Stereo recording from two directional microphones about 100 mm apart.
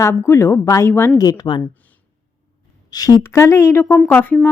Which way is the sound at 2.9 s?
40° left (ahead or behind).